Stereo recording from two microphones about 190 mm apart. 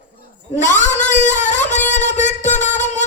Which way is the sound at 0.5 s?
40° left (ahead or behind).